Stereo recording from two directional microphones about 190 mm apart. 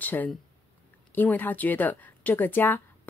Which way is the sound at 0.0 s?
10° left (ahead or behind).